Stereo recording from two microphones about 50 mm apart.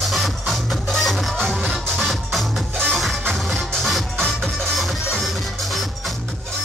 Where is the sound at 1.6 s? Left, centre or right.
Right.